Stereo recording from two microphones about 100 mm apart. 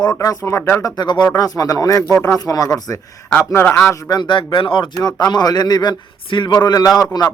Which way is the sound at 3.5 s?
20° left (ahead or behind).